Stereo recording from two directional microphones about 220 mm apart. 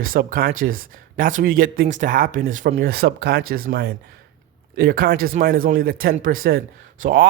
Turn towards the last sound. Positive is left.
turn(degrees=-40)  # may be behind; listen again after turning